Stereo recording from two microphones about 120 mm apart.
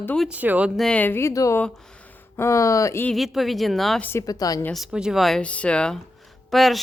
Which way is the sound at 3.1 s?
Centre (ahead or behind).